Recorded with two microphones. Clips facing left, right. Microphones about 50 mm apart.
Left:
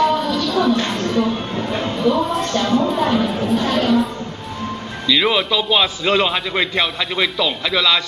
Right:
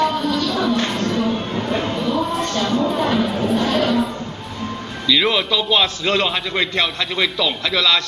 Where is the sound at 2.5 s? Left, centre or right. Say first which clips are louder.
Left 5 dB; left.